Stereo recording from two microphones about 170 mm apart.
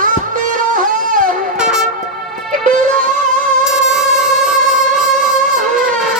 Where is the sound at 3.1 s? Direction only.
50° right (ahead or behind).